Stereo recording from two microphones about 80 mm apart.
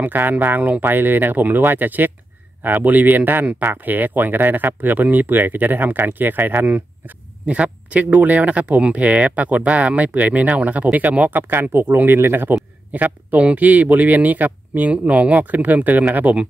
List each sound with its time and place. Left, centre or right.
0.0 s speech: right